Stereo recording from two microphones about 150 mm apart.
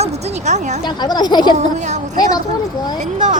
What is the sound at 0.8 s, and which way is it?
Speech, 30° left (ahead or behind).